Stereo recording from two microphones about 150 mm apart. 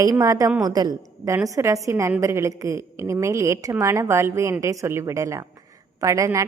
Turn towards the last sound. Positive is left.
turn(degrees=-20)  # may be behind; listen again after turning